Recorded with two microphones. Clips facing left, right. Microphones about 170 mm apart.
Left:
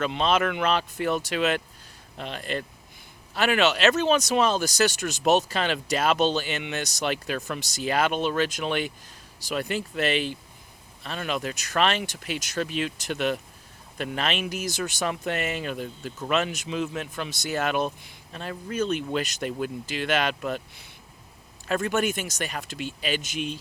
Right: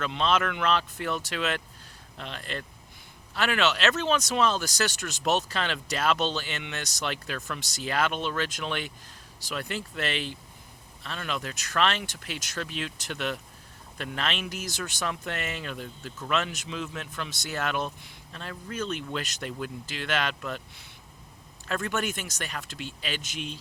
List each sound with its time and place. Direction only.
0.0 s speech: 10° left (ahead or behind)
21.7 s speech: 10° left (ahead or behind)